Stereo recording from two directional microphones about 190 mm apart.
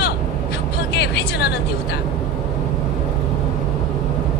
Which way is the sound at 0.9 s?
60° left (ahead or behind).